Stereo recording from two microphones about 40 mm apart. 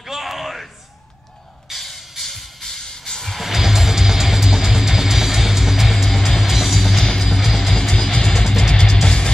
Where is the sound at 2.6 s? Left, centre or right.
Centre.